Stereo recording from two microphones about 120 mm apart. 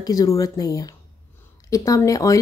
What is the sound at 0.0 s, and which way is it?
A woman's voice, 30° left (ahead or behind).